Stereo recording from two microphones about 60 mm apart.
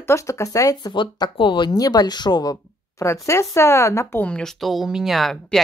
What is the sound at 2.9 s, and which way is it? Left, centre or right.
Speech, left.